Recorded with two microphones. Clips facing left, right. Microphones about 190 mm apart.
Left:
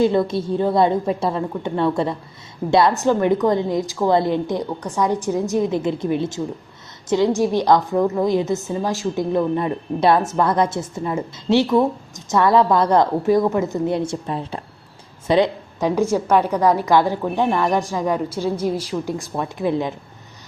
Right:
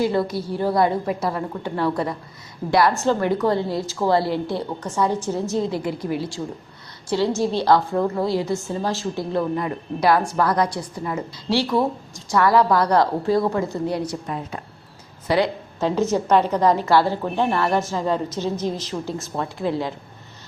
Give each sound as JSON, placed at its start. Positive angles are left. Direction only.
{"t": 0.0, "sound": "a woman's voice", "side_deg": 20}
{"t": 15.3, "sound": "a woman's voice", "side_deg": 15}